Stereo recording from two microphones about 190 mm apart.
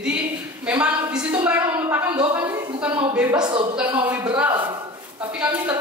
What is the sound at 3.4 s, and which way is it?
Speech, 25° right (ahead or behind).